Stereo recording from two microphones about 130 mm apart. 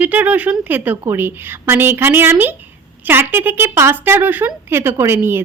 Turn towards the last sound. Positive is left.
turn(degrees=-20)  # may be behind; listen again after turning